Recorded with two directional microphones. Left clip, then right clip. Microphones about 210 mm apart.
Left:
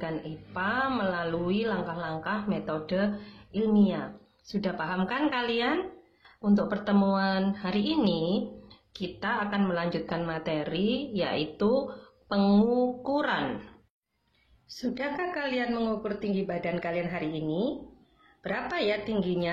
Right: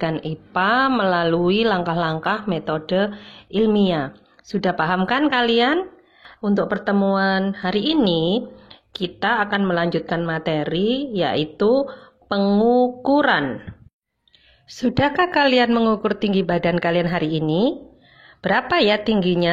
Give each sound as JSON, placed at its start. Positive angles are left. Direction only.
{"t": 0.0, "sound": "a woman's voice", "side_deg": -45}
{"t": 12.4, "sound": "speech", "side_deg": -20}
{"t": 12.6, "sound": "a woman's voice", "side_deg": -30}
{"t": 14.8, "sound": "a woman's voice", "side_deg": -40}